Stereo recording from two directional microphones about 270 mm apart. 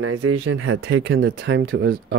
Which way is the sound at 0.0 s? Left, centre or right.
Right.